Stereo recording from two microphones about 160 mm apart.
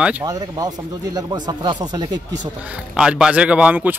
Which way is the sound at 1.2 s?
25° right (ahead or behind).